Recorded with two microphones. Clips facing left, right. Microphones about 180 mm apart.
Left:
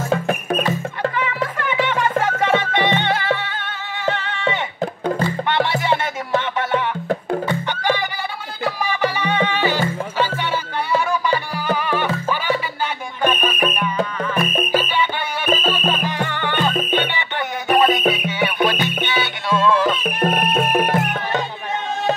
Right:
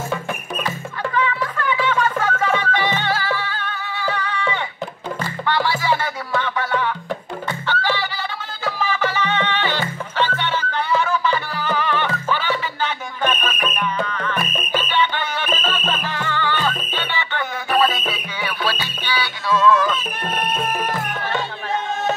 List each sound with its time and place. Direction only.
1.7 s music: 20° left (ahead or behind)
20.0 s music: 65° left (ahead or behind)